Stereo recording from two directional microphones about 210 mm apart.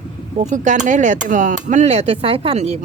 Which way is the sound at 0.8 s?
35° right (ahead or behind).